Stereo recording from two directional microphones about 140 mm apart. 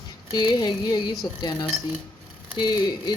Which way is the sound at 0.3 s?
30° left (ahead or behind).